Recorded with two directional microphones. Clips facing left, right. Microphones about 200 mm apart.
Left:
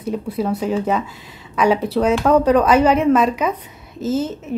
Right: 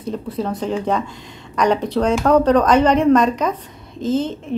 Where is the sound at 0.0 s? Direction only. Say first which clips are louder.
Left 2 dB; 10° left (ahead or behind).